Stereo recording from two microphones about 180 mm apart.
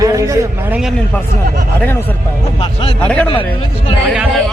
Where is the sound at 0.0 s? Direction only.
20° right (ahead or behind).